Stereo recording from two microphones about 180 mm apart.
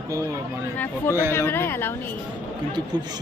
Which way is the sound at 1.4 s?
15° left (ahead or behind).